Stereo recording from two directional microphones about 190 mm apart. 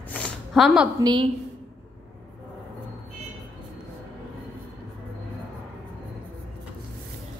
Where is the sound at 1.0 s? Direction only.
25° right (ahead or behind).